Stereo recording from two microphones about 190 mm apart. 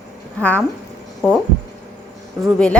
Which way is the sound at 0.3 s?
10° left (ahead or behind).